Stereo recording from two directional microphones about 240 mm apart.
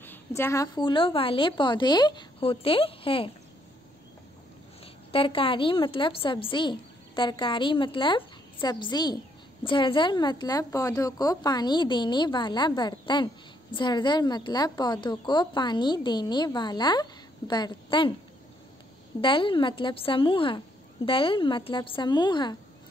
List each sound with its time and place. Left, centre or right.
0.0 s a woman's voice: centre
5.1 s a woman's voice: left
19.2 s a woman's voice: left